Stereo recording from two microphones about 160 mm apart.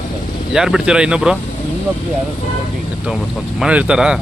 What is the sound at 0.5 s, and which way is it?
Speech, 5° right (ahead or behind).